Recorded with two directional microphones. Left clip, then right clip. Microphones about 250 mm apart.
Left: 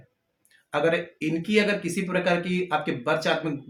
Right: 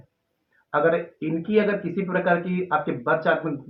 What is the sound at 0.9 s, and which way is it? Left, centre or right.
Speech, left.